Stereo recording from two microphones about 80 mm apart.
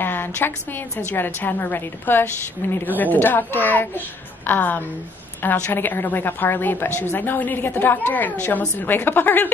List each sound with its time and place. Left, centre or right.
0.0 s a woman's voice: left